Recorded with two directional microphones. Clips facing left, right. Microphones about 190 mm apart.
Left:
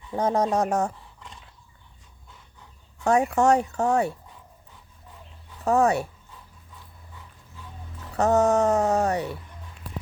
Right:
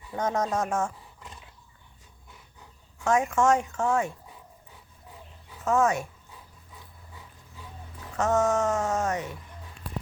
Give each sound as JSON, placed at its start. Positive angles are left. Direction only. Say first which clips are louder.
{"t": 0.2, "sound": "speech", "louder": "left 4 dB", "side_deg": 30}
{"t": 3.0, "sound": "speech", "louder": "left 3 dB", "side_deg": 35}
{"t": 5.6, "sound": "speech", "louder": "left 3 dB", "side_deg": 35}
{"t": 8.1, "sound": "speech", "louder": "left 4 dB", "side_deg": 35}